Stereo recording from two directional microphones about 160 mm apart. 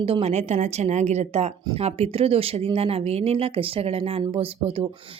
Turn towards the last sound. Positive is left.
turn(degrees=-35)  # may be behind; listen again after turning